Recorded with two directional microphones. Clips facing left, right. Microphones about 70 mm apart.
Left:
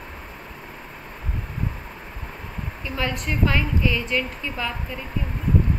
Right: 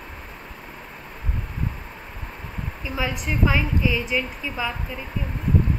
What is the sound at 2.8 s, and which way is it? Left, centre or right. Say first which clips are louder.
A woman's voice: even; centre.